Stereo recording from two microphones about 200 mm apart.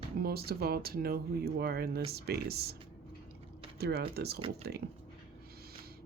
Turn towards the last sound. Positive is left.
turn(degrees=-50)  # may be behind; listen again after turning